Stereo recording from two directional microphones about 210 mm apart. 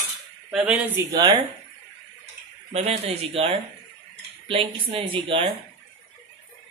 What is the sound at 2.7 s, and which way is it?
Speech, 30° right (ahead or behind).